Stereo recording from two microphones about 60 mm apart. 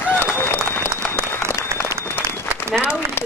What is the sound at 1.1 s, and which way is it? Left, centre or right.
Applause, right.